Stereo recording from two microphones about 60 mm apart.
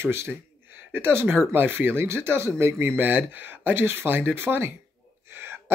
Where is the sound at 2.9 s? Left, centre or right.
Right.